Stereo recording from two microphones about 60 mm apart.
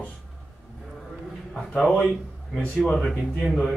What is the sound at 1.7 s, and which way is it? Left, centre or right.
Speech, centre.